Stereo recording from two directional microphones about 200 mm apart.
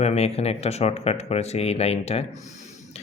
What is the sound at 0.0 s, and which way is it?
Speech, 30° left (ahead or behind).